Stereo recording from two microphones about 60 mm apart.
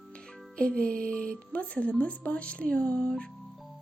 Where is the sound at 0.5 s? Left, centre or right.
Centre.